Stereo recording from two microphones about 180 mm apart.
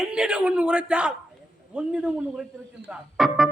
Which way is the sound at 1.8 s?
5° right (ahead or behind).